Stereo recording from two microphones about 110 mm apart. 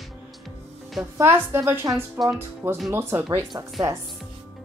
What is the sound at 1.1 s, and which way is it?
A woman's voice, 25° right (ahead or behind).